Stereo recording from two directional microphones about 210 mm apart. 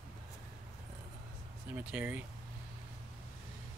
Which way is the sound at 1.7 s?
10° right (ahead or behind).